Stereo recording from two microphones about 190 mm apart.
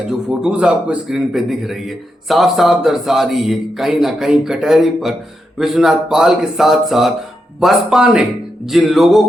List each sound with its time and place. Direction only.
0.1 s a man's voice: 5° right (ahead or behind)